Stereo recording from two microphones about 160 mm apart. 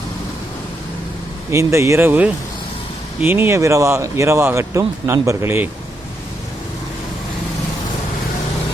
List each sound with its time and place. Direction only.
1.5 s speech: 15° right (ahead or behind)